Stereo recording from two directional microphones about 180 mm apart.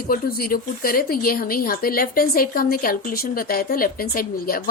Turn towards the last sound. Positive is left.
turn(degrees=55)  # may be behind; listen again after turning